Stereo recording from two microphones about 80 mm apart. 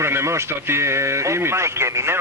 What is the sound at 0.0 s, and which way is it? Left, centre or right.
A man's voice, right.